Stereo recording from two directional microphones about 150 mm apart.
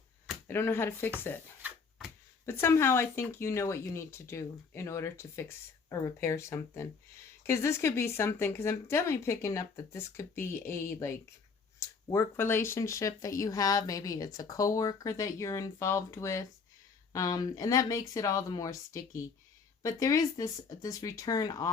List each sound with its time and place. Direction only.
0.4 s speech: 15° left (ahead or behind)
1.6 s a sound: 10° right (ahead or behind)
2.5 s speech: 15° left (ahead or behind)